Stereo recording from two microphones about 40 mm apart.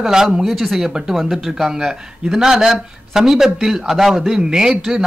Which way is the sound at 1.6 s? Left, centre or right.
Centre.